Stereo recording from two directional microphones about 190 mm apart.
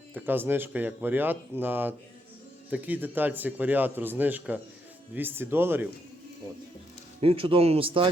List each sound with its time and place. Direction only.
0.1 s a man's voice: 10° right (ahead or behind)
7.2 s speech: 30° right (ahead or behind)